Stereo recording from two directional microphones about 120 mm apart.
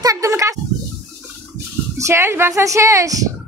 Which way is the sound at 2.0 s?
25° right (ahead or behind).